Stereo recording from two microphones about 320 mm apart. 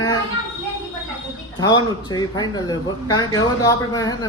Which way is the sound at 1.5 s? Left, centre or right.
Centre.